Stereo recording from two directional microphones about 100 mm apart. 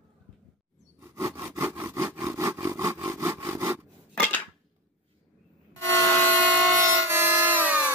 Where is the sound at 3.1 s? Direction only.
25° right (ahead or behind).